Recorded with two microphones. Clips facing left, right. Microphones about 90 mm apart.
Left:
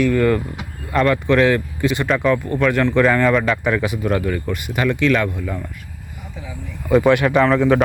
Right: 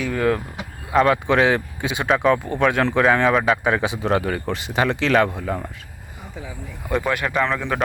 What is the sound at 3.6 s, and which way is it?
Speech, 20° right (ahead or behind).